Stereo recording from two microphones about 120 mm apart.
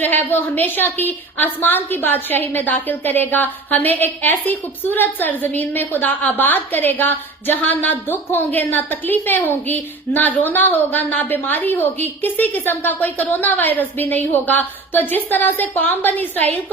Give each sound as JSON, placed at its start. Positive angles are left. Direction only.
{"t": 0.0, "sound": "a woman's voice", "side_deg": 15}